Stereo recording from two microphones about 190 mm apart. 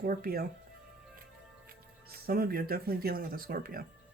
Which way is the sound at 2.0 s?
55° right (ahead or behind).